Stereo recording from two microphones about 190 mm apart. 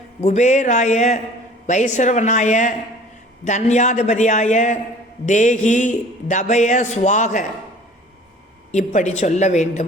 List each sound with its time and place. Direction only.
0.2 s a man's voice: 40° left (ahead or behind)
8.7 s a man's voice: 40° left (ahead or behind)